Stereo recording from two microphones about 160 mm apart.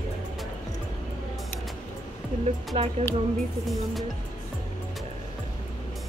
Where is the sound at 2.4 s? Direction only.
40° right (ahead or behind).